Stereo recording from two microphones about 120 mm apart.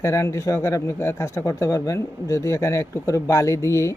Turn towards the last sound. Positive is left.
turn(degrees=25)  # may be behind; listen again after turning